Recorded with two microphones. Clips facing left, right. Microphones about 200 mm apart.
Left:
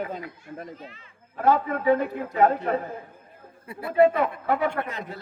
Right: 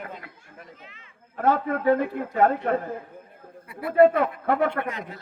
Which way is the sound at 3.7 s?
25° left (ahead or behind).